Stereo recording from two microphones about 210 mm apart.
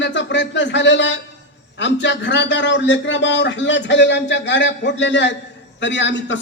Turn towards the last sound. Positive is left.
turn(degrees=60)  # may be behind; listen again after turning